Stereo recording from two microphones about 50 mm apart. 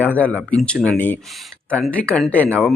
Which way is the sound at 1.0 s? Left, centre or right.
Left.